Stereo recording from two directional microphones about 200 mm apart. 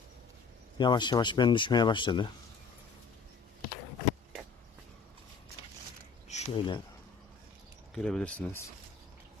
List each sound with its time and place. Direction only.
0.8 s speech: 20° left (ahead or behind)
6.2 s a sound: 35° left (ahead or behind)
7.9 s speech: 5° left (ahead or behind)